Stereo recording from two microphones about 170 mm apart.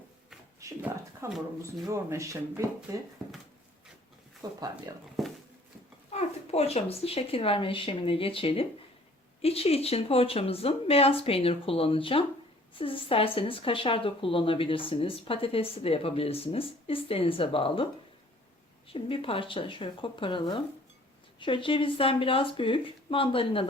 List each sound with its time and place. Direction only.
0.6 s a sound: 15° right (ahead or behind)
1.9 s speech: 15° right (ahead or behind)
4.4 s speech: 25° right (ahead or behind)
6.1 s speech: 40° left (ahead or behind)
18.9 s speech: 30° left (ahead or behind)